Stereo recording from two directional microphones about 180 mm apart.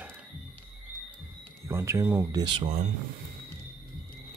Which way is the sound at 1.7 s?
15° right (ahead or behind).